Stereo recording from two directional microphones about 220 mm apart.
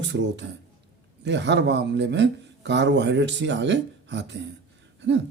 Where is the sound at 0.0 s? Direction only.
55° right (ahead or behind).